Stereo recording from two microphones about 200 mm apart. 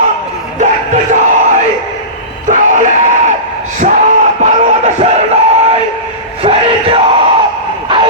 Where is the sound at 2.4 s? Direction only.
40° right (ahead or behind).